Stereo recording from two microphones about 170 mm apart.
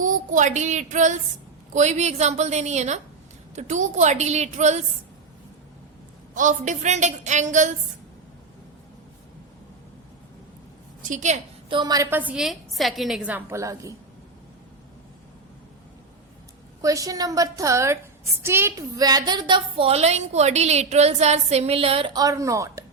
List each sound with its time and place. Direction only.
0.0 s a woman's voice: 50° right (ahead or behind)
6.3 s a woman's voice: 50° right (ahead or behind)
11.0 s a woman's voice: 45° right (ahead or behind)
11.7 s a woman's voice: 25° right (ahead or behind)
16.8 s a woman's voice: 20° right (ahead or behind)